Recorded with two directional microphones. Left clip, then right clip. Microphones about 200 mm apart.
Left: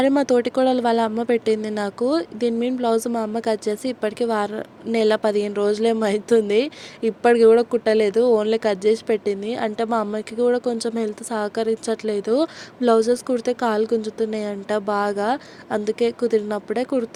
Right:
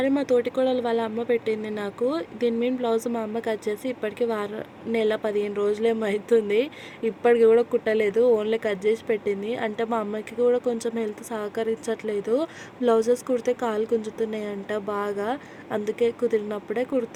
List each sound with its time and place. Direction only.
0.0 s speech: 30° left (ahead or behind)
13.8 s speech: 40° left (ahead or behind)
14.2 s speech: 25° left (ahead or behind)